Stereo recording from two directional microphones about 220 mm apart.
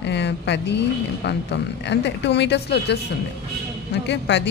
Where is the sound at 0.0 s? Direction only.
50° left (ahead or behind).